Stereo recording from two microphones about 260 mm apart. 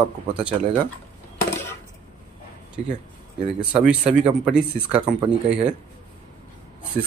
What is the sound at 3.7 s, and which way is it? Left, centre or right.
Speech, centre.